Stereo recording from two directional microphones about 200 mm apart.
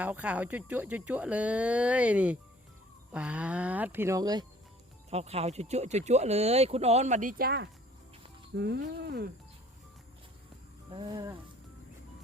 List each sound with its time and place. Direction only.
0.0 s speech: 5° right (ahead or behind)
5.1 s speech: 30° right (ahead or behind); by 9.3 s 55° right (ahead or behind)
10.9 s speech: 20° right (ahead or behind)